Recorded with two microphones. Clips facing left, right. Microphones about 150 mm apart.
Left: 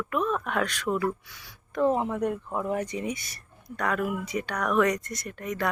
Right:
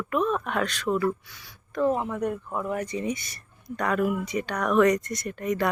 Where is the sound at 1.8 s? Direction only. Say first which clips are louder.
Even; 20° left (ahead or behind).